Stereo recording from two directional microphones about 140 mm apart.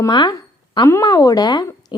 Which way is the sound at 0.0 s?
30° left (ahead or behind).